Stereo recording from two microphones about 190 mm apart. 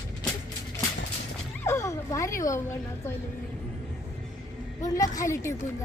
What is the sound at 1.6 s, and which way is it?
Dog, 15° left (ahead or behind).